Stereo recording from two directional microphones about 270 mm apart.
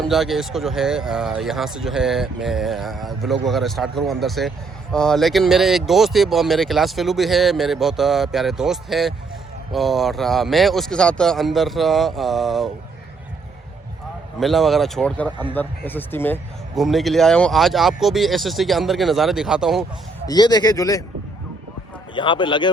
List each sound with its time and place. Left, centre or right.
0.0 s speech: centre
14.3 s speech: centre
20.2 s speech: centre
22.1 s speech: centre